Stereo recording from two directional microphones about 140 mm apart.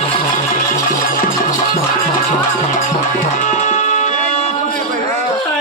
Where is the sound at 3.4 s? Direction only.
60° left (ahead or behind).